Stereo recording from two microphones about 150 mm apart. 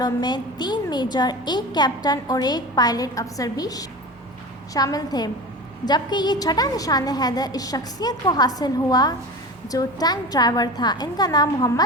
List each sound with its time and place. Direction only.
0.0 s a woman's voice: 30° left (ahead or behind)